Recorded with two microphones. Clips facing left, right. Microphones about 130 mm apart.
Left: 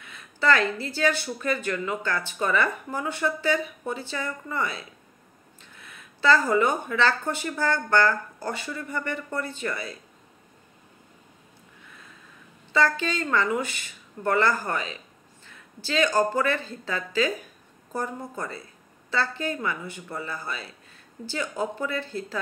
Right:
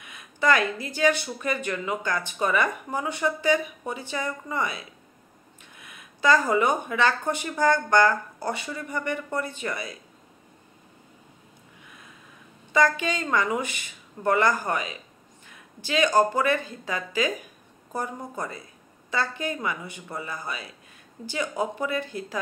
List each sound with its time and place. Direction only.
0.0 s speech: 15° right (ahead or behind)
12.7 s speech: 15° right (ahead or behind)